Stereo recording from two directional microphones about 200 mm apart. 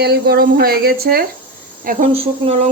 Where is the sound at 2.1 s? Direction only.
30° right (ahead or behind).